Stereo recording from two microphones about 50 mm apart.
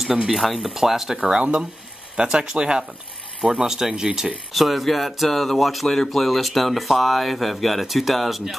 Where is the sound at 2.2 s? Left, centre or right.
Centre.